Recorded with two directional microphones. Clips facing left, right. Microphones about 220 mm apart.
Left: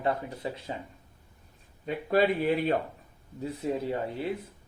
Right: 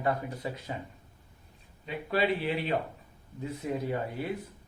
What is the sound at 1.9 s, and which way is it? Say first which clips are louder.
Speech: left 4 dB; 45° left (ahead or behind).